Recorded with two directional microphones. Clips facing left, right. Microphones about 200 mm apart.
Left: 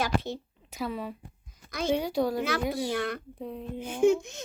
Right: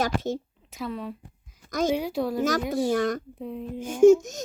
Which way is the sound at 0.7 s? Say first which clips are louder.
Right 1 dB; centre (ahead or behind).